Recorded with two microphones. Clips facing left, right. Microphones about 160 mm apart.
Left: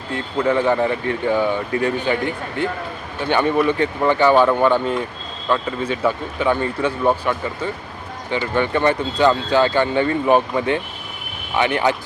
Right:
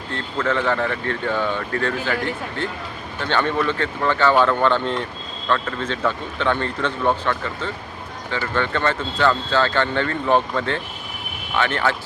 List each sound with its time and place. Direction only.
0.1 s speech: 15° left (ahead or behind)